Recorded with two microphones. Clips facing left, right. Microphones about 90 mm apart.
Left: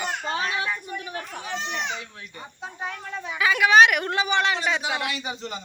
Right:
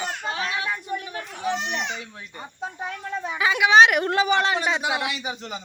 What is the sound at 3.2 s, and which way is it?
Speech, 30° right (ahead or behind).